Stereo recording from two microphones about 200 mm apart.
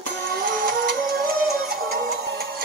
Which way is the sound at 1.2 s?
50° right (ahead or behind).